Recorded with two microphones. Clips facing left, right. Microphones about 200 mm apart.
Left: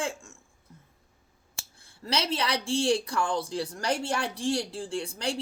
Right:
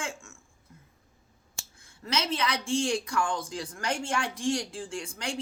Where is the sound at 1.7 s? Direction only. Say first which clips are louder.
Left 1 dB; 30° left (ahead or behind).